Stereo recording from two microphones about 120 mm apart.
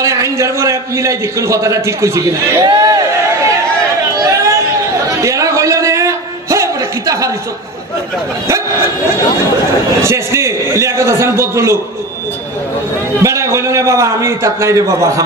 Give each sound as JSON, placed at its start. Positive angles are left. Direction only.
{"t": 0.0, "sound": "a man's voice", "side_deg": -25}
{"t": 4.2, "sound": "chatter", "side_deg": -25}
{"t": 5.0, "sound": "a sound", "side_deg": -25}
{"t": 10.0, "sound": "a man's voice", "side_deg": -25}
{"t": 13.2, "sound": "a man's voice", "side_deg": -25}